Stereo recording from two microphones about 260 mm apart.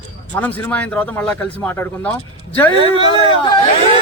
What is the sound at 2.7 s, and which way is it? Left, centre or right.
Speech, centre.